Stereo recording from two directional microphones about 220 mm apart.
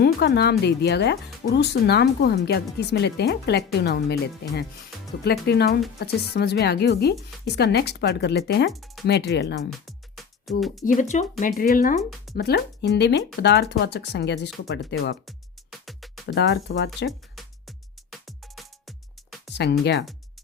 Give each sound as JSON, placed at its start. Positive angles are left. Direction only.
{"t": 0.0, "sound": "a woman's voice", "side_deg": 45}
{"t": 8.7, "sound": "speech", "side_deg": 0}
{"t": 9.0, "sound": "a woman's voice", "side_deg": 50}
{"t": 9.8, "sound": "music", "side_deg": 0}
{"t": 11.1, "sound": "speech", "side_deg": 35}
{"t": 12.4, "sound": "a woman's voice", "side_deg": 50}
{"t": 15.9, "sound": "music", "side_deg": 0}
{"t": 16.2, "sound": "a woman's voice", "side_deg": 50}
{"t": 17.1, "sound": "music", "side_deg": 0}
{"t": 19.5, "sound": "a woman's voice", "side_deg": 50}